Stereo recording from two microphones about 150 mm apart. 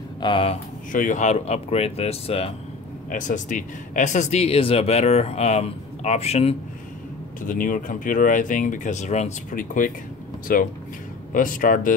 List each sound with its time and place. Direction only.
0.2 s speech: 35° left (ahead or behind)
0.9 s speech: 60° left (ahead or behind); by 2.5 s 40° left (ahead or behind)
3.1 s speech: 60° left (ahead or behind)
7.4 s speech: 65° left (ahead or behind); by 9.6 s 50° left (ahead or behind)
9.6 s speech: 65° left (ahead or behind)